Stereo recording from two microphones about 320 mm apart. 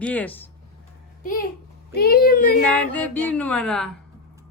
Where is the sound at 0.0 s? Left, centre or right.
Centre.